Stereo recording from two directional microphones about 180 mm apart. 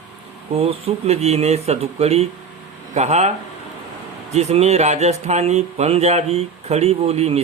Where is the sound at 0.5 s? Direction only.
30° right (ahead or behind).